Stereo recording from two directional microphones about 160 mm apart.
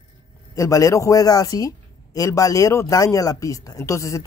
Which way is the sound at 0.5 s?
20° left (ahead or behind).